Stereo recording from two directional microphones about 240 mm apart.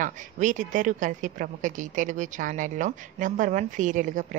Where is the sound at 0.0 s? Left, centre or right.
Right.